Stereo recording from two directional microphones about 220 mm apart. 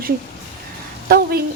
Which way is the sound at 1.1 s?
45° right (ahead or behind).